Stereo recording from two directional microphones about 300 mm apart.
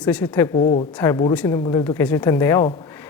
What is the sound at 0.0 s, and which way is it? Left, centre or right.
Speech, centre.